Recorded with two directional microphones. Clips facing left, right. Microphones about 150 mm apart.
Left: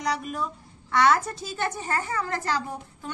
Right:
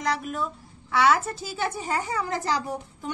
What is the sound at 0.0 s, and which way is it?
A woman's voice, centre (ahead or behind).